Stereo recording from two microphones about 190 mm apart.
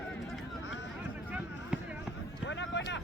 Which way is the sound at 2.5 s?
65° left (ahead or behind).